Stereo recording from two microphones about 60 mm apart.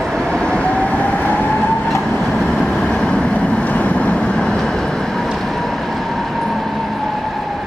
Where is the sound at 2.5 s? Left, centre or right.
Centre.